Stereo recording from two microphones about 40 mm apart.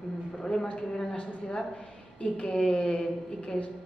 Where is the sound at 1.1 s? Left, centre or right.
Left.